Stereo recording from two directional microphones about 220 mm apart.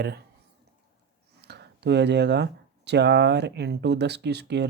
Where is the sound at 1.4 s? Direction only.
50° right (ahead or behind).